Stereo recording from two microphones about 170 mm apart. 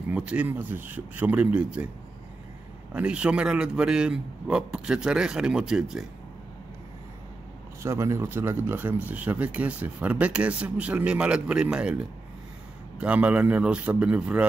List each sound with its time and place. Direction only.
0.1 s speech: 5° right (ahead or behind)
2.9 s a man's voice: 5° right (ahead or behind)
7.8 s speech: 15° right (ahead or behind)
13.0 s speech: 10° right (ahead or behind)